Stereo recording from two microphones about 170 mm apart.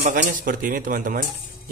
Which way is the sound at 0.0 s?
50° right (ahead or behind).